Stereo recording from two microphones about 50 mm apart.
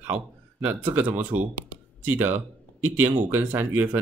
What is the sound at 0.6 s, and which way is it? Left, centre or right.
Speech, right.